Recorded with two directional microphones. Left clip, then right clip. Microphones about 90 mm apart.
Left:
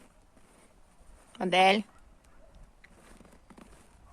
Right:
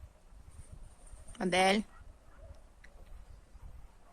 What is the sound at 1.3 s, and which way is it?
Speech, 5° right (ahead or behind).